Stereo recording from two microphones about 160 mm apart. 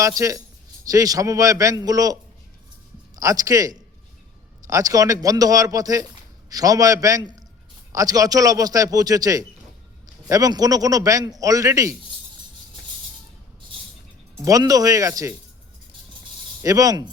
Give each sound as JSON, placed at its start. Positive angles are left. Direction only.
{"t": 0.0, "sound": "a man's voice", "side_deg": -20}
{"t": 3.2, "sound": "a man's voice", "side_deg": -20}
{"t": 14.4, "sound": "a man's voice", "side_deg": -20}
{"t": 16.6, "sound": "a man's voice", "side_deg": -20}